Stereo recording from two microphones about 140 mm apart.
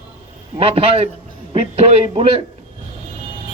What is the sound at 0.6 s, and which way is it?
Speech, 45° right (ahead or behind).